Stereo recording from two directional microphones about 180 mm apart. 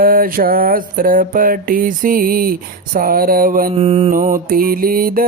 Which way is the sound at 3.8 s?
35° right (ahead or behind).